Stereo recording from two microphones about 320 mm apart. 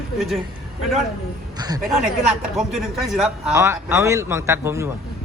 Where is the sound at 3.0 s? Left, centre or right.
Centre.